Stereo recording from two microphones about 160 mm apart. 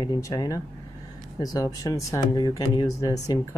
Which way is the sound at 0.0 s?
25° left (ahead or behind).